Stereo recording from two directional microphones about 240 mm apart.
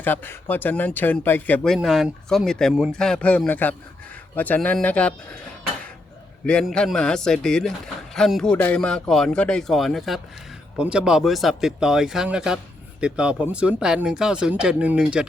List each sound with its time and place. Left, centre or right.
0.0 s speech: centre
6.4 s speech: centre